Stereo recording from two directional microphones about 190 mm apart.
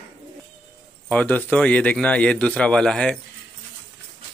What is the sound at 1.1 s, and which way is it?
A man's voice, 5° left (ahead or behind).